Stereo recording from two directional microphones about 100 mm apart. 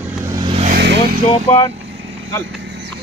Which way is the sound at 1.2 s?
60° left (ahead or behind).